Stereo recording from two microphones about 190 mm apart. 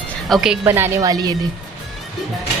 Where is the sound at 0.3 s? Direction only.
Centre (ahead or behind).